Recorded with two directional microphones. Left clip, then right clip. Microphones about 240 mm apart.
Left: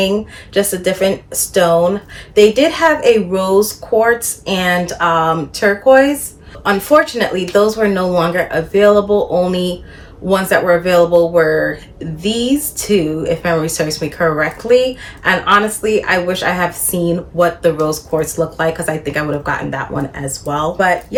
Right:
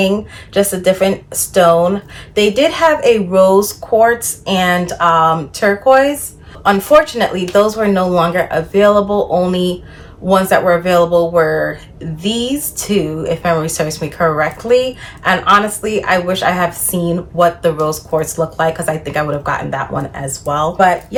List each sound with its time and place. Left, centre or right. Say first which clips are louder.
0.5 s speech: right 3 dB; centre